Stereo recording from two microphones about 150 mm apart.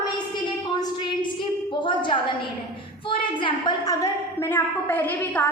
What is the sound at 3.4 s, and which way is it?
A woman's voice, 20° left (ahead or behind).